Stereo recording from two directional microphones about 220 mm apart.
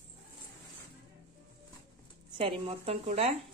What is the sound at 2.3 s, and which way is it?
A woman's voice, 25° right (ahead or behind).